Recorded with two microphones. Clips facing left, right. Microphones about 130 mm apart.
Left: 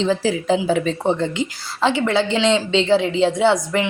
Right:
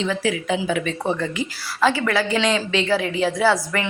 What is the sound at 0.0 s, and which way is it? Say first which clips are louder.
A woman's voice: left 4 dB; 30° left (ahead or behind).